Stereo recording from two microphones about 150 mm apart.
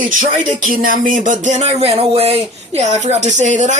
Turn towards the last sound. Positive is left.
turn(degrees=-50)  # may be behind; listen again after turning